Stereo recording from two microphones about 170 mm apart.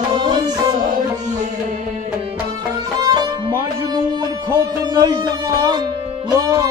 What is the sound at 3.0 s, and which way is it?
Music, 25° right (ahead or behind).